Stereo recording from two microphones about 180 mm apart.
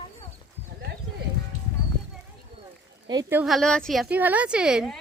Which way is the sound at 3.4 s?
Centre (ahead or behind).